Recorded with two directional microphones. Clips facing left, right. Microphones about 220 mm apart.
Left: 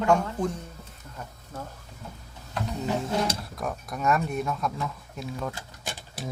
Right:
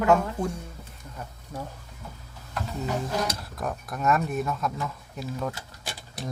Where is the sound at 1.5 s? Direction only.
15° right (ahead or behind).